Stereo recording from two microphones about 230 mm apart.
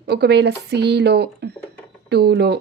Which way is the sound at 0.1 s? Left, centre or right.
Right.